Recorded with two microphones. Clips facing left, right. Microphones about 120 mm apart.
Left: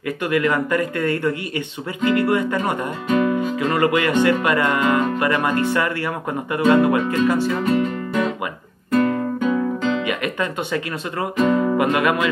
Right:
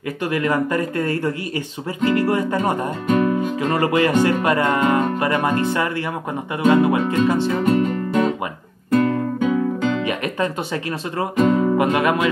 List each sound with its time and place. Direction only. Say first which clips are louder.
0.2 s speech: even; 30° right (ahead or behind)
7.6 s music: right 2 dB; 45° right (ahead or behind)
9.9 s speech: right 1 dB; 35° right (ahead or behind)